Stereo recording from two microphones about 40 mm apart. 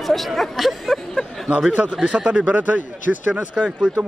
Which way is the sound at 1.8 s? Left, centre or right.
Right.